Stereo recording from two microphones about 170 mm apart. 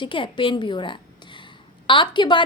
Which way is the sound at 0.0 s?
30° left (ahead or behind).